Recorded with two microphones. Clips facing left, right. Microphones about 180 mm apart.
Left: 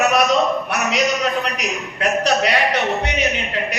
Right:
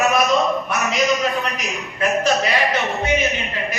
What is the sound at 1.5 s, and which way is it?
Speech, 70° left (ahead or behind).